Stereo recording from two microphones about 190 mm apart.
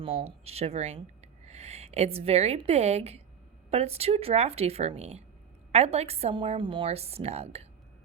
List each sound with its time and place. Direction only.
0.0 s a woman's voice: 30° right (ahead or behind)